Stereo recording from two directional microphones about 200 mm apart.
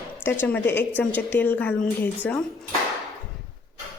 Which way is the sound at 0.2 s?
10° left (ahead or behind).